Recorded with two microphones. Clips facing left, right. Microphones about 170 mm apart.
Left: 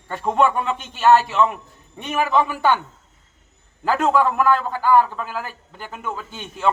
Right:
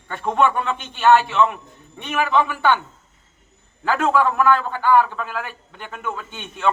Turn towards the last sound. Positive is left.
turn(degrees=5)  # may be behind; listen again after turning